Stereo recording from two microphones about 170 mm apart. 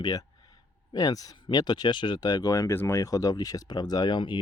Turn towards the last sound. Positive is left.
turn(degrees=25)  # may be behind; listen again after turning